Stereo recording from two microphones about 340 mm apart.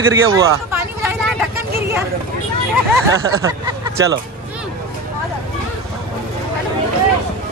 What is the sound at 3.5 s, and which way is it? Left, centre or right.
Hubbub, centre.